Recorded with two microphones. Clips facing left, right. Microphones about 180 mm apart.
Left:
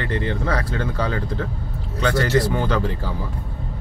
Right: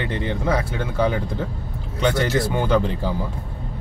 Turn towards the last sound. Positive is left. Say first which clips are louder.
# right 3 dB
turn(degrees=-20)  # may be behind; listen again after turning